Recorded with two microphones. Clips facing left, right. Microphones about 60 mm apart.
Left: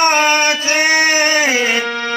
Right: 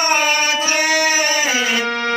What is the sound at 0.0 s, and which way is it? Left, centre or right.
Singing, left.